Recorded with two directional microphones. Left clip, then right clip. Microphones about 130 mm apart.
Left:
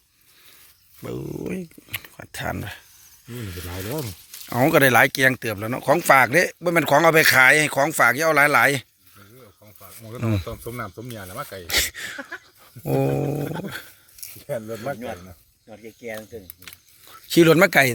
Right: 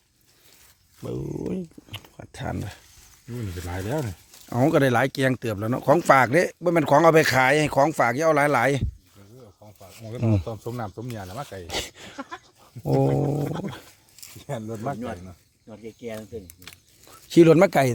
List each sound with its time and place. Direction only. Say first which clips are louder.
1.2 s speech: even; 5° left (ahead or behind)
1.5 s a sound: left 1 dB; 10° right (ahead or behind)
3.2 s speech: even; 5° right (ahead or behind)
3.9 s speech: right 1 dB; 5° left (ahead or behind); by 5.8 s 20° right (ahead or behind)
5.8 s speech: left 2 dB; 35° right (ahead or behind); by 8.9 s 20° right (ahead or behind)
10.2 s speech: right 1 dB; 15° right (ahead or behind)
10.6 s speech: even; 15° left (ahead or behind)
11.6 s speech: left 12 dB; 15° right (ahead or behind)
13.4 s dog: left 1 dB; 15° right (ahead or behind)
14.8 s speech: right 2 dB; 90° right
17.1 s speech: even; 25° right (ahead or behind)